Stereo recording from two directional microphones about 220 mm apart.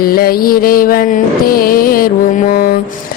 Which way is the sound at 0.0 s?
40° left (ahead or behind).